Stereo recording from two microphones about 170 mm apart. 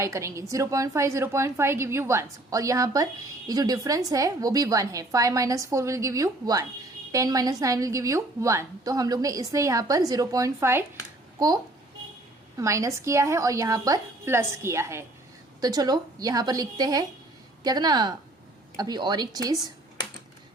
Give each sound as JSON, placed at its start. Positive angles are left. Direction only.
{"t": 0.0, "sound": "a woman's voice", "side_deg": -15}